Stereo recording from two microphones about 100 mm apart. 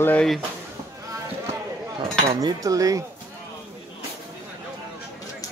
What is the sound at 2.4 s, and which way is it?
Cutlery, 35° right (ahead or behind).